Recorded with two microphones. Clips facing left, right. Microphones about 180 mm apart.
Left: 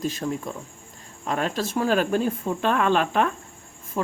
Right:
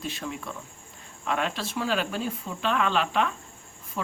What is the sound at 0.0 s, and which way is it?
Speech, 40° left (ahead or behind).